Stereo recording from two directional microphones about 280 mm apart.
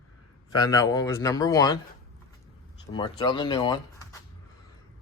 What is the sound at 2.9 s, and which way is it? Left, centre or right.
Speech, centre.